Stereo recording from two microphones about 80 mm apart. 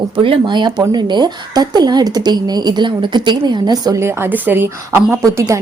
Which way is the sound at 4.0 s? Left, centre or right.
Right.